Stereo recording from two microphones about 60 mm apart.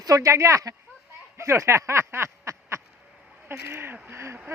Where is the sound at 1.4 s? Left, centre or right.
Right.